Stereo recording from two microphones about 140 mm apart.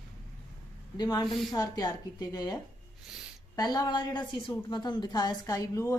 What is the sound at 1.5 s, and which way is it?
A woman's voice, 25° left (ahead or behind).